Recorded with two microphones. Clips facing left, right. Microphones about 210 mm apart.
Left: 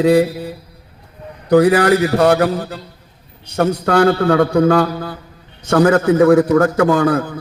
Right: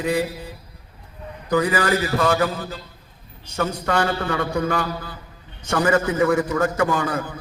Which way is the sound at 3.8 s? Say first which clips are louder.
Left 10 dB; 65° left (ahead or behind).